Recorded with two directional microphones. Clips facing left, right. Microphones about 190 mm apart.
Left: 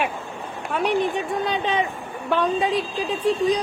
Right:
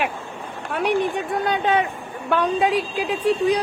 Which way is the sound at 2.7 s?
10° right (ahead or behind).